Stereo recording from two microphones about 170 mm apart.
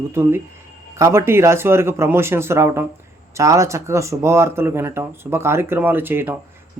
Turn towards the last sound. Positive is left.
turn(degrees=-10)  # may be behind; listen again after turning